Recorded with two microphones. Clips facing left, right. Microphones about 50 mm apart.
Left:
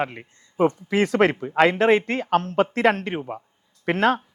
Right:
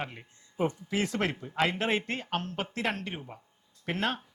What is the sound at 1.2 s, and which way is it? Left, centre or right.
Speech, left.